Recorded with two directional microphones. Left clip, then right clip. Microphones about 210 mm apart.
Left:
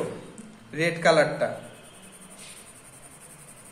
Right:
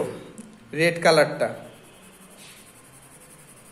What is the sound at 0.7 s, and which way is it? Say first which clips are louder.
Speech: right 3 dB; 35° right (ahead or behind).